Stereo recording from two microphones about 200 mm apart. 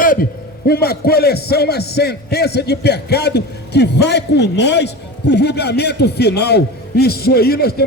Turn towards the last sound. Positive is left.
turn(degrees=50)  # may be behind; listen again after turning